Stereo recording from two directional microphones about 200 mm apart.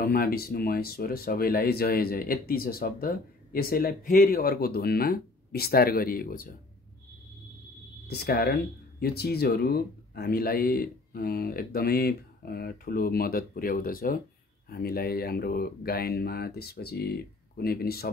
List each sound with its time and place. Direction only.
0.0 s speech: 50° left (ahead or behind)
8.1 s speech: 50° left (ahead or behind)